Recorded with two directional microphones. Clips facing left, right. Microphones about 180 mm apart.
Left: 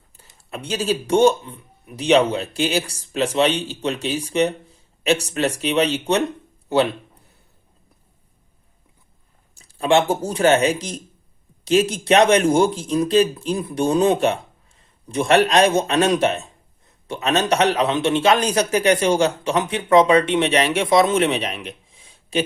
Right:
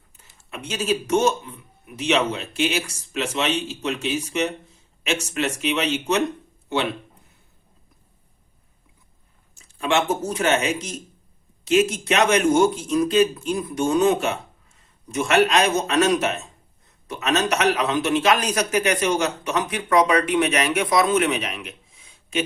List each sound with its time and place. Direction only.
0.2 s a man's voice: 35° left (ahead or behind)
9.6 s a man's voice: 35° left (ahead or behind)